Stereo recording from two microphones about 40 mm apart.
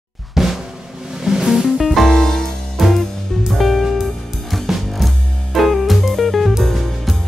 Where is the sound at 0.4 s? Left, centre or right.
Centre.